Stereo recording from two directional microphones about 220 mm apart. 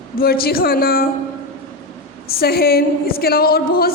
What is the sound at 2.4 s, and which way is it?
A woman's voice, 45° left (ahead or behind).